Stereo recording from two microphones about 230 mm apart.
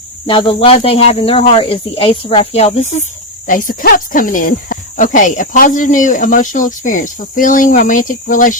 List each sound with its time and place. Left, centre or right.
0.3 s speech: left